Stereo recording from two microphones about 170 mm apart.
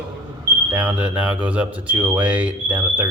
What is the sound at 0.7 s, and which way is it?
Speech, 10° right (ahead or behind).